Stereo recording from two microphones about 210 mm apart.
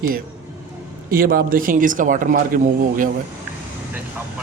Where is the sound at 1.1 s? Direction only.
45° right (ahead or behind).